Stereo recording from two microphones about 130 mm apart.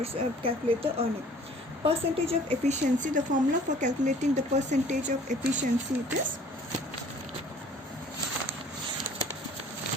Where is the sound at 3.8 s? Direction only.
65° right (ahead or behind).